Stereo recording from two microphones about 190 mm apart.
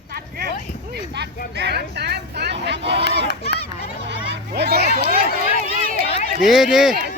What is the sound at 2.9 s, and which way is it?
Speech, 65° right (ahead or behind).